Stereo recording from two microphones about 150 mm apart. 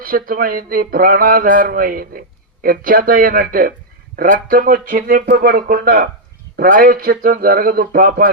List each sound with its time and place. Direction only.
0.0 s speech: 70° right (ahead or behind)